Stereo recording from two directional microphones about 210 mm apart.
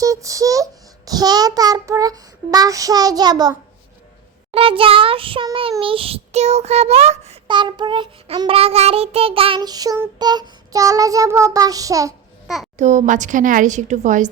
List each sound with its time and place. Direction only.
0.0 s child singing: 15° right (ahead or behind)
12.7 s a woman's voice: 35° right (ahead or behind)